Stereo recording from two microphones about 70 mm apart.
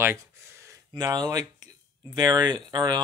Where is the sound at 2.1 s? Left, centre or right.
Right.